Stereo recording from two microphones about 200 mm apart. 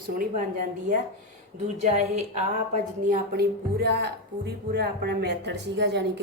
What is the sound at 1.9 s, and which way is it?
A woman's voice, 35° right (ahead or behind).